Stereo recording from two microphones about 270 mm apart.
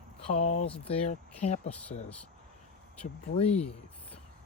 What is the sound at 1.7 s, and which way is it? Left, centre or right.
Speech, centre.